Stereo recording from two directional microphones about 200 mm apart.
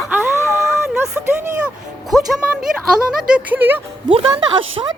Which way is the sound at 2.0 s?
Centre (ahead or behind).